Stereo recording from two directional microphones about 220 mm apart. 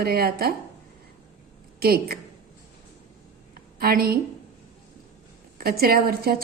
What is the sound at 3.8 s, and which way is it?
Speech, 45° right (ahead or behind).